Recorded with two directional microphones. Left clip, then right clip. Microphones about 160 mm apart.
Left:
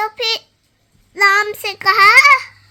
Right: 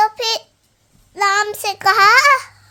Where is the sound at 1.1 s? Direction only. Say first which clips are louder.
Left 3 dB; centre (ahead or behind); by 2.5 s 25° right (ahead or behind).